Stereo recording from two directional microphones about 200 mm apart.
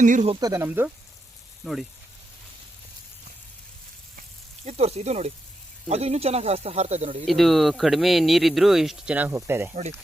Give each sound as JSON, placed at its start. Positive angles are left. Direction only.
{"t": 0.0, "sound": "speech", "side_deg": -40}
{"t": 0.3, "sound": "speech", "side_deg": -15}
{"t": 4.6, "sound": "speech", "side_deg": -30}
{"t": 7.3, "sound": "speech", "side_deg": 0}